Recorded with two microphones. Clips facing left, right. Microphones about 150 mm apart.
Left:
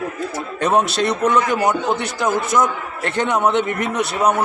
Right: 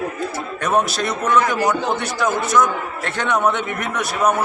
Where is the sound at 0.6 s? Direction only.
30° left (ahead or behind).